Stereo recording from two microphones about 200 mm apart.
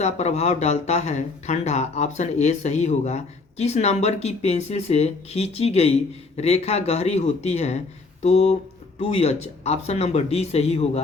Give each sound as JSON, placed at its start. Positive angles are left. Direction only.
{"t": 0.0, "sound": "speech", "side_deg": 35}